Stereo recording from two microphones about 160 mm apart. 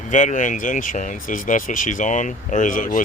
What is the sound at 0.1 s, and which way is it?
Speech, 50° left (ahead or behind).